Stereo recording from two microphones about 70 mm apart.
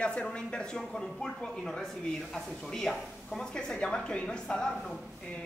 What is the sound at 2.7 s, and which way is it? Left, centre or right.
A man's voice, centre.